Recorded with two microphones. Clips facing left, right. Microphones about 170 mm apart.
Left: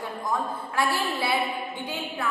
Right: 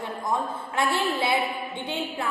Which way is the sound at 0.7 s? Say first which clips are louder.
Right 2 dB; 20° right (ahead or behind).